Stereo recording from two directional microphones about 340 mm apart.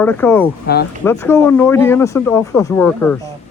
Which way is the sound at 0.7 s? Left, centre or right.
Left.